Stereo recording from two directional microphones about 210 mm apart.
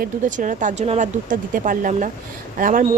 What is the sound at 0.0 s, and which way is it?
Speech, 35° right (ahead or behind).